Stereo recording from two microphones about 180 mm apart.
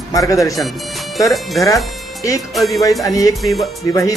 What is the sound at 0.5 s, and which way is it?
Speech, centre (ahead or behind).